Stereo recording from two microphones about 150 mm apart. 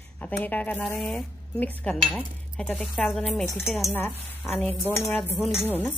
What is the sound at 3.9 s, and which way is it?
A woman's voice, 10° left (ahead or behind).